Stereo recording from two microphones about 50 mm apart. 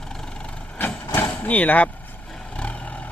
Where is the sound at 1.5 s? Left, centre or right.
Left.